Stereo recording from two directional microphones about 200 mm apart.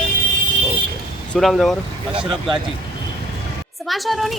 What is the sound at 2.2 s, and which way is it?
Speech, 25° right (ahead or behind).